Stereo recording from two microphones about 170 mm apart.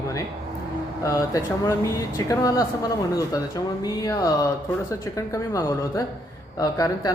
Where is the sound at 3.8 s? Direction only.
20° left (ahead or behind).